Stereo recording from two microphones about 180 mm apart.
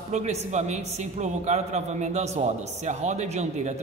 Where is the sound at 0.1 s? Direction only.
40° right (ahead or behind).